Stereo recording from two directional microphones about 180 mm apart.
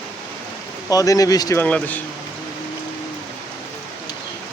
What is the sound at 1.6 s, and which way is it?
Speech, 10° left (ahead or behind).